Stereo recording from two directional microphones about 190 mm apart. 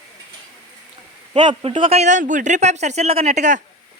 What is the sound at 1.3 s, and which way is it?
Speech, 35° right (ahead or behind).